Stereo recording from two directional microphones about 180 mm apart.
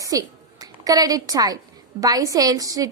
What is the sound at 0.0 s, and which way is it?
A woman's voice, 20° right (ahead or behind).